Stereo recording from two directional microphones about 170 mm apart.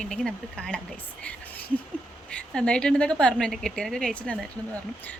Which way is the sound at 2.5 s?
5° left (ahead or behind).